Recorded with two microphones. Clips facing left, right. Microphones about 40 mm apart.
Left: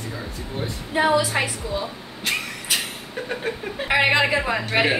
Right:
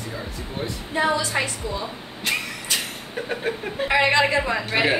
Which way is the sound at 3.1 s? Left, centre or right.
Centre.